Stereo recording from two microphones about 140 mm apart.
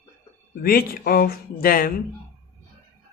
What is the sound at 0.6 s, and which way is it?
Speech, 90° left.